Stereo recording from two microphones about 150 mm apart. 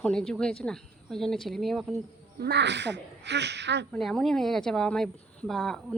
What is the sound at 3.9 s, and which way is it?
Speech, 5° left (ahead or behind).